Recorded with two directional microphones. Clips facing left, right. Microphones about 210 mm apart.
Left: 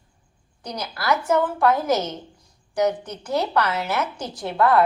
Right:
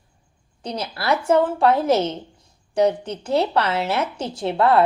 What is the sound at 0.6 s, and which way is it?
A woman's voice, 30° right (ahead or behind).